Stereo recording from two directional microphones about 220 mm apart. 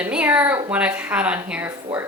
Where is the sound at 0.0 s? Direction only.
5° right (ahead or behind).